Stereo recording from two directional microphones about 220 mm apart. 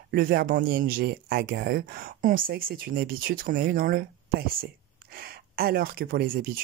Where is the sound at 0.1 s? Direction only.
40° right (ahead or behind).